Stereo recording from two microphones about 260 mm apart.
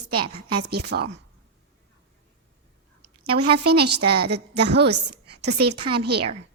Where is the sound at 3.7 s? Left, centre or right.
Right.